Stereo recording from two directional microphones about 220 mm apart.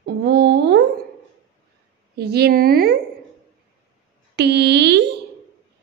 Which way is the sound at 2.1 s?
45° right (ahead or behind).